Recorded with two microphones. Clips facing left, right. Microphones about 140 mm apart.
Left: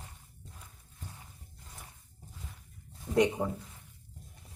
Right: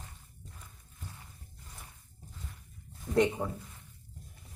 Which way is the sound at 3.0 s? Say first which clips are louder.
Left 1 dB; 15° left (ahead or behind).